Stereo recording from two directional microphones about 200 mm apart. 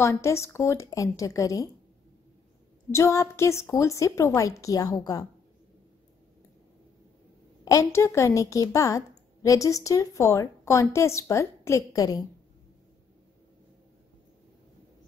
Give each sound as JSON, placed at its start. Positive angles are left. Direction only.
{"t": 0.0, "sound": "a woman's voice", "side_deg": 15}
{"t": 2.9, "sound": "a woman's voice", "side_deg": 15}
{"t": 7.6, "sound": "a woman's voice", "side_deg": 15}